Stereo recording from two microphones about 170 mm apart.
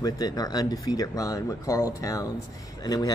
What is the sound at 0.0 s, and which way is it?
Speech, 20° left (ahead or behind).